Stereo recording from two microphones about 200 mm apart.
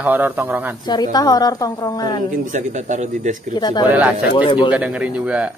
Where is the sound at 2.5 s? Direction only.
35° right (ahead or behind).